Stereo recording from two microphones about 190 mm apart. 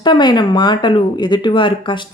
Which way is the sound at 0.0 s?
25° left (ahead or behind).